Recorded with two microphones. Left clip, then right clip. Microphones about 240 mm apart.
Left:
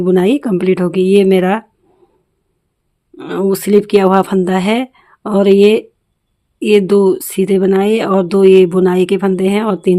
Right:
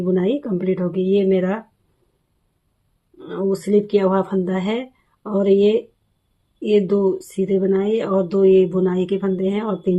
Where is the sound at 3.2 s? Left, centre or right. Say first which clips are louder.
Left 7 dB; left.